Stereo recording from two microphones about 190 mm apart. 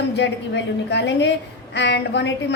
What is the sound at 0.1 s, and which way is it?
A woman's voice, 65° left (ahead or behind).